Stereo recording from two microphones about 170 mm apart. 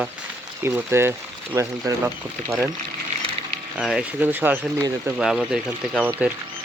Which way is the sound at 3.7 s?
5° right (ahead or behind).